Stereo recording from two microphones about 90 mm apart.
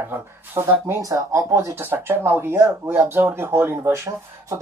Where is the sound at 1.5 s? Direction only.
25° right (ahead or behind).